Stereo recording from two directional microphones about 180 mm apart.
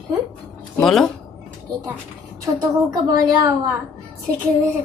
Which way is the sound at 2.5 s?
20° right (ahead or behind).